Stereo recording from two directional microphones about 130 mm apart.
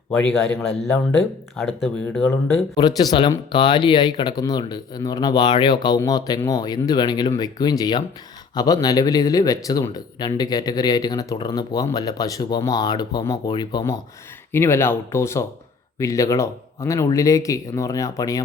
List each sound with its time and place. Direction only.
0.1 s a man's voice: 10° left (ahead or behind)
2.7 s speech: 30° left (ahead or behind)
14.5 s speech: 20° left (ahead or behind)